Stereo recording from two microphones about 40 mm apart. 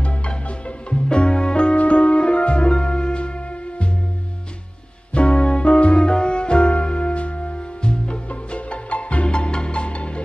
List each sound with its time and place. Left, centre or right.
0.0 s music: left
5.1 s music: left